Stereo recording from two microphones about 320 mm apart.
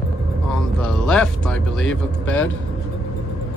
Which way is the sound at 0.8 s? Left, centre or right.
Centre.